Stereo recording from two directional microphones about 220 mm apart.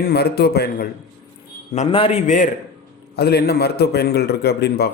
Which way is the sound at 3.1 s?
45° left (ahead or behind).